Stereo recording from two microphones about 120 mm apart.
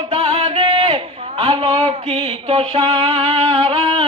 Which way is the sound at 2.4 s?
50° right (ahead or behind).